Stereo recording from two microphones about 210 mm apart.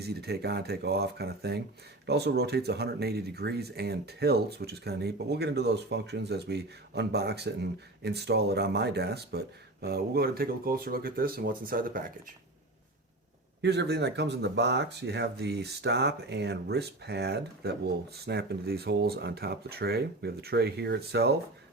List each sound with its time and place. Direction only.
0.0 s speech: 50° right (ahead or behind)
13.6 s speech: 55° right (ahead or behind)